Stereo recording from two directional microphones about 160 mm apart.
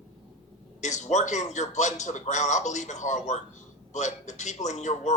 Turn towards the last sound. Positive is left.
turn(degrees=45)  # may be behind; listen again after turning